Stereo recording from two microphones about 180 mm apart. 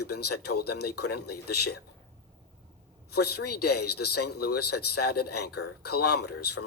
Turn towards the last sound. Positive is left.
turn(degrees=65)  # may be behind; listen again after turning